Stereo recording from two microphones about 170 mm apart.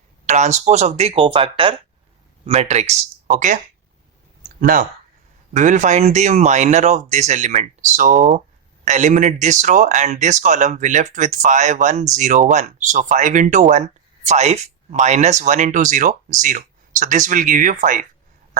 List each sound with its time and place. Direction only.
0.3 s speech: 45° right (ahead or behind)
4.6 s speech: 50° right (ahead or behind)